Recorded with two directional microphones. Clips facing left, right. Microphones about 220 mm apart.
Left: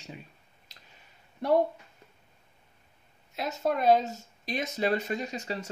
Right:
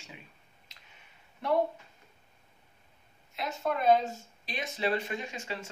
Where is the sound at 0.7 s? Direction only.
35° left (ahead or behind).